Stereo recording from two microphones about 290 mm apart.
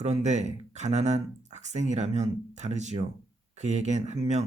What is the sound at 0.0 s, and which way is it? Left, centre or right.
Speech, right.